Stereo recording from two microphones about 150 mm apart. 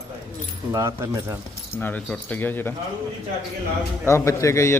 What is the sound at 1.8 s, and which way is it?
Speech, 10° left (ahead or behind).